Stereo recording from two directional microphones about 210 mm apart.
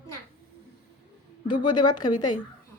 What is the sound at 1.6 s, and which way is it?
Speech, 20° left (ahead or behind).